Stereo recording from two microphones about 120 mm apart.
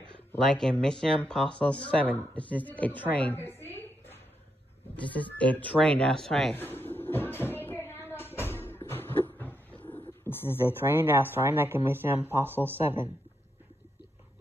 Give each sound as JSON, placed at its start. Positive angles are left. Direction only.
{"t": 0.4, "sound": "a woman's voice", "side_deg": 5}
{"t": 6.5, "sound": "cupboard open or close", "side_deg": 15}
{"t": 10.9, "sound": "speech", "side_deg": -20}